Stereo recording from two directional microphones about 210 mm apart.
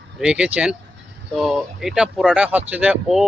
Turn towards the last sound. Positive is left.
turn(degrees=-5)  # may be behind; listen again after turning